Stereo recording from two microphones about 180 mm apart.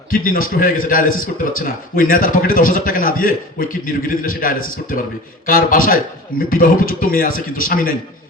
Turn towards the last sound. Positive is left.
turn(degrees=50)  # may be behind; listen again after turning